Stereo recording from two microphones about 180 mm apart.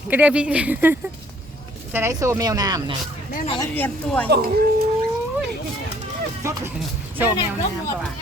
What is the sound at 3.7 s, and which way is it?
Speech, 10° left (ahead or behind).